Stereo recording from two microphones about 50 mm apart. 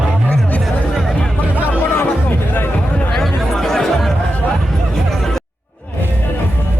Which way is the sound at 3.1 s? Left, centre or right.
Centre.